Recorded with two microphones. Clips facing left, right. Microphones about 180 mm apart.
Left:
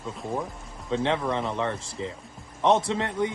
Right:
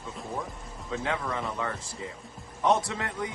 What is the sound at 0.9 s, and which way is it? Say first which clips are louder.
A man's voice: left 6 dB; 25° left (ahead or behind).